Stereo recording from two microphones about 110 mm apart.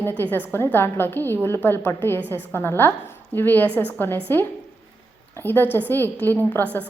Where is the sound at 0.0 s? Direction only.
20° left (ahead or behind).